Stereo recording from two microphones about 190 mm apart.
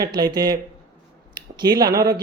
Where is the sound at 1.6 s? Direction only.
20° right (ahead or behind).